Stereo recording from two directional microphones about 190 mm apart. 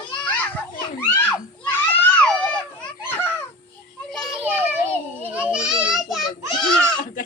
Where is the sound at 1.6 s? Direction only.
10° left (ahead or behind).